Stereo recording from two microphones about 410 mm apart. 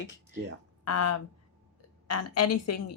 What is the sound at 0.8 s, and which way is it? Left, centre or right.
Speech, left.